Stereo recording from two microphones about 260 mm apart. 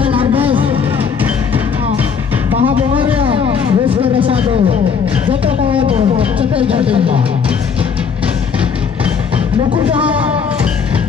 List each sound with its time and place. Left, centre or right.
0.0 s vehicle: right
3.2 s music: right
5.3 s a sound: right